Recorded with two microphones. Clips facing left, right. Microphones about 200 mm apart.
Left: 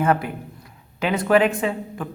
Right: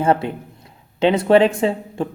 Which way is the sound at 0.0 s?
25° right (ahead or behind).